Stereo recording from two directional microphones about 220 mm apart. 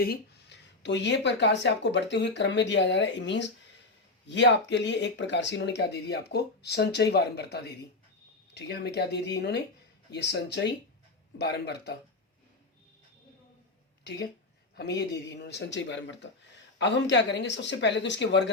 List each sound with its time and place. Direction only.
0.0 s speech: 45° left (ahead or behind)
14.0 s speech: 50° left (ahead or behind)